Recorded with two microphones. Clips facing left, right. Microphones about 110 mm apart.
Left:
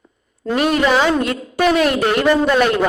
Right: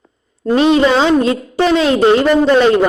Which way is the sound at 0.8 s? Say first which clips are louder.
Right 4 dB; 30° right (ahead or behind).